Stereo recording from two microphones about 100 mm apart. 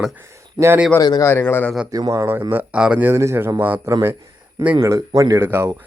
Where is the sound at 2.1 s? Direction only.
25° right (ahead or behind).